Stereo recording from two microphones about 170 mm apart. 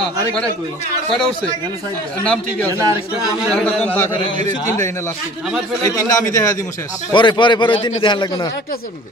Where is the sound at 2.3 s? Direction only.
10° left (ahead or behind).